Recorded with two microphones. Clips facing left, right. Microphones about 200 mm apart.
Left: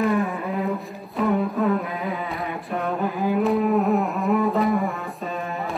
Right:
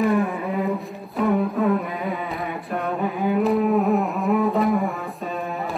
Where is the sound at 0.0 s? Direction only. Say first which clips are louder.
Right 2 dB; centre (ahead or behind).